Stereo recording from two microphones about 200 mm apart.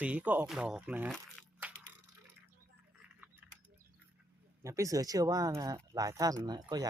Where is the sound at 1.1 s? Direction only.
5° right (ahead or behind).